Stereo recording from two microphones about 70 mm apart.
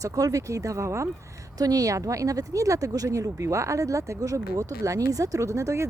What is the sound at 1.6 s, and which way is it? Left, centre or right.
Speech, right.